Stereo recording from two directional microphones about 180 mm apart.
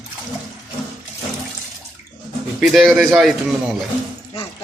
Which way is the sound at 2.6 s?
Centre (ahead or behind).